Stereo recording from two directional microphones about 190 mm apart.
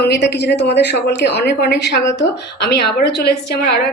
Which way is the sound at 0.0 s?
60° left (ahead or behind).